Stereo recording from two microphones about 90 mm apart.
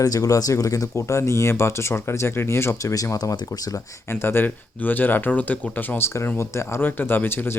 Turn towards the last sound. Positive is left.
turn(degrees=25)  # may be behind; listen again after turning